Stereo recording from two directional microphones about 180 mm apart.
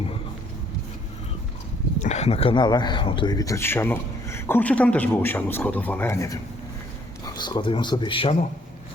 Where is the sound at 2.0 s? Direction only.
40° left (ahead or behind).